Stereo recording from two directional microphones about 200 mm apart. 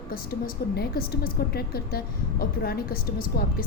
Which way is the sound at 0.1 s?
50° left (ahead or behind).